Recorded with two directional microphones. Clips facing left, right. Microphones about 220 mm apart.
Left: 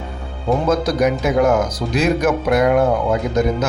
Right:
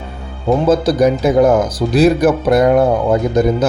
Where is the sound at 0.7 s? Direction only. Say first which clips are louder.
Right 5 dB; 30° right (ahead or behind).